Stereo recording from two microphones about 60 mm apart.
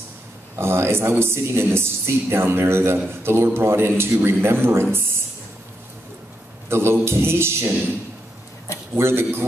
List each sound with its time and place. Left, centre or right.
0.6 s speech: right
6.7 s a man's voice: right
8.9 s speech: right